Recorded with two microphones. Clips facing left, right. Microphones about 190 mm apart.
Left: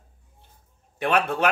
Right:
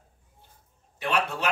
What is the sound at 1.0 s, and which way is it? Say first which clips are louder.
Speech: left 5 dB; 55° left (ahead or behind).